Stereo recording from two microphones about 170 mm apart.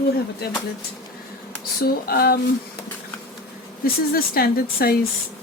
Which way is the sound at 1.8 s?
65° left (ahead or behind).